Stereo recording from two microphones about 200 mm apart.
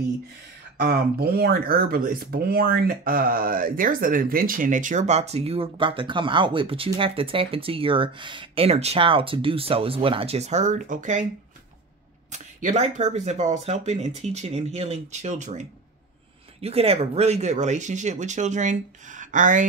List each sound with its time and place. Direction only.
0.7 s speech: 50° right (ahead or behind)
12.3 s speech: 40° right (ahead or behind)
16.6 s speech: 30° right (ahead or behind)